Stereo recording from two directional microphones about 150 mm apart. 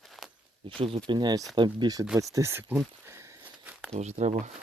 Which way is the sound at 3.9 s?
50° right (ahead or behind).